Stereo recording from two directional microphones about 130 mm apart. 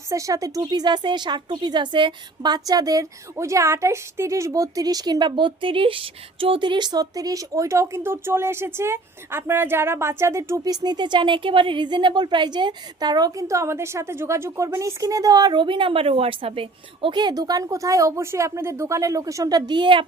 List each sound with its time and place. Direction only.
0.1 s a woman's voice: 25° right (ahead or behind)